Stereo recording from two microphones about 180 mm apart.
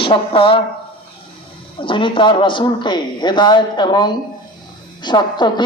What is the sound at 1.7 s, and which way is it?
A woman's voice, 30° left (ahead or behind).